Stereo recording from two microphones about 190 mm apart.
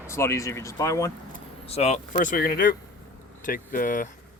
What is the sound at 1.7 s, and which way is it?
Speech, 35° left (ahead or behind).